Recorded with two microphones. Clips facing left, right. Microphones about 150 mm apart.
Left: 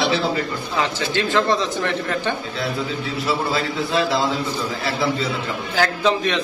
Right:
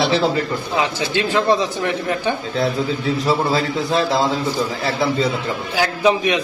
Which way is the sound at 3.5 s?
35° right (ahead or behind).